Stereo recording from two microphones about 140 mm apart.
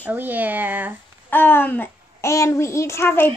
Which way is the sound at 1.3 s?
15° left (ahead or behind).